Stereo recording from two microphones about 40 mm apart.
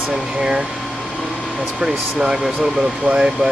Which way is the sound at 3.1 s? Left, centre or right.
Right.